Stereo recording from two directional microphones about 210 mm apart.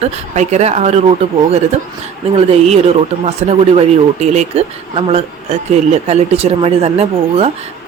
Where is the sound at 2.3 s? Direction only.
30° right (ahead or behind).